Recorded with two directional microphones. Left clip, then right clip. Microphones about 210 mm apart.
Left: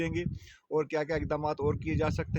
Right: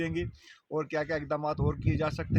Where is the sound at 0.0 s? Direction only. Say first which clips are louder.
Even; 45° left (ahead or behind).